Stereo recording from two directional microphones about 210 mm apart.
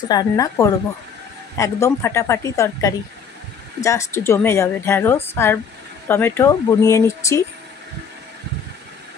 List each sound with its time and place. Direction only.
0.1 s a woman's voice: 20° left (ahead or behind)